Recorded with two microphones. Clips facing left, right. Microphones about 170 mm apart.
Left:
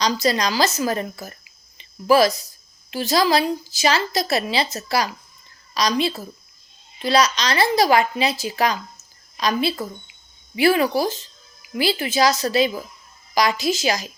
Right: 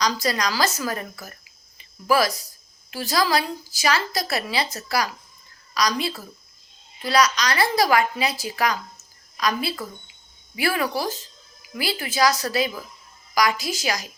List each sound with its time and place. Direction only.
0.0 s speech: 25° left (ahead or behind)